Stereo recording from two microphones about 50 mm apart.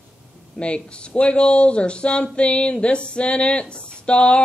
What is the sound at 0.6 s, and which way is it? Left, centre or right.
Speech, left.